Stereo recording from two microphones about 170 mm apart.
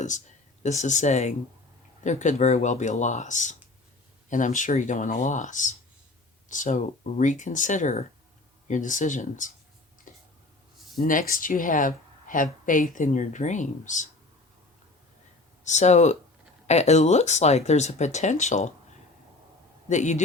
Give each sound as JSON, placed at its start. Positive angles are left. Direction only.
{"t": 0.6, "sound": "speech", "side_deg": 45}
{"t": 10.1, "sound": "a sound", "side_deg": 50}
{"t": 10.9, "sound": "speech", "side_deg": 50}
{"t": 15.6, "sound": "speech", "side_deg": 40}
{"t": 19.9, "sound": "speech", "side_deg": 45}